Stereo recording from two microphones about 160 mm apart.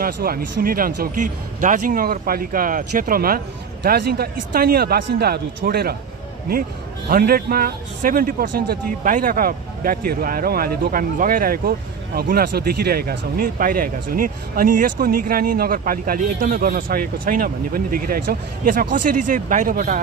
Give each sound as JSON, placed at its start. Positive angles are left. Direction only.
{"t": 0.0, "sound": "speech", "side_deg": -65}
{"t": 7.1, "sound": "speech", "side_deg": -70}